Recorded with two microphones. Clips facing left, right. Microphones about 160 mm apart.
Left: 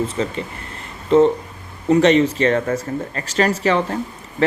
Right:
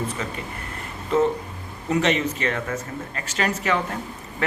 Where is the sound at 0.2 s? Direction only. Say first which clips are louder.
Left 7 dB; 30° left (ahead or behind).